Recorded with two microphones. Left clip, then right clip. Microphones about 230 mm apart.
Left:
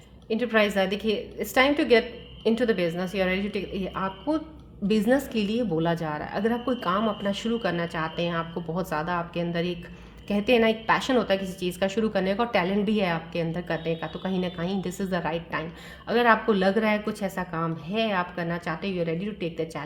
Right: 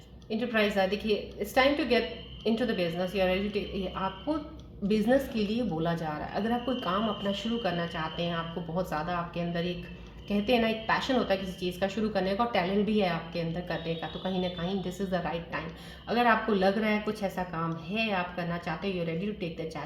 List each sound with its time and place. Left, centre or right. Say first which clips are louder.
0.3 s a woman's voice: left 5 dB; left